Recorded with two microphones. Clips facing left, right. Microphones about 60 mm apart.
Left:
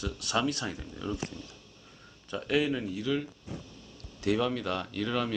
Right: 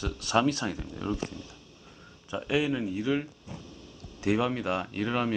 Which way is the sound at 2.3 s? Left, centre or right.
Centre.